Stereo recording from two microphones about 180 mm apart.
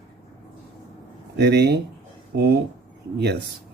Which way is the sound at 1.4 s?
70° right (ahead or behind).